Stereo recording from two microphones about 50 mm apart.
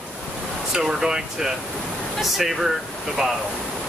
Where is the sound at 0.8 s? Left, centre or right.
Centre.